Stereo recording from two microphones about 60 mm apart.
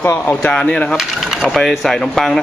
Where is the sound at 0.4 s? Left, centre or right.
Centre.